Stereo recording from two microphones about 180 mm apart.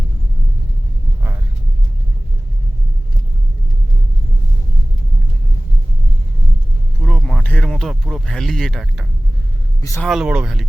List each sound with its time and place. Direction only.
7.0 s a sound: 5° left (ahead or behind)
9.8 s speech: 15° left (ahead or behind)
10.1 s speech: 5° right (ahead or behind)